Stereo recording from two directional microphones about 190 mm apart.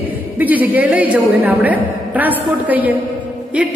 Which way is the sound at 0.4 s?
10° right (ahead or behind).